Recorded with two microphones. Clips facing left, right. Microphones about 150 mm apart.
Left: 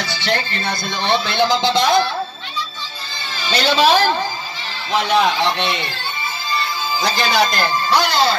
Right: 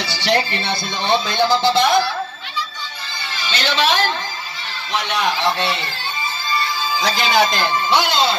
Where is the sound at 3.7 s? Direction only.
35° left (ahead or behind).